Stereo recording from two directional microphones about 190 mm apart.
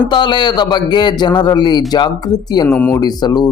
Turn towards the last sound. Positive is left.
turn(degrees=20)  # may be behind; listen again after turning